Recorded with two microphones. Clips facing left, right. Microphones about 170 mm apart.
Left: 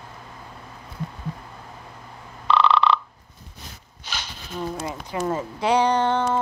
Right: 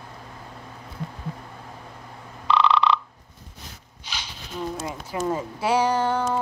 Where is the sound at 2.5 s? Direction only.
55° left (ahead or behind).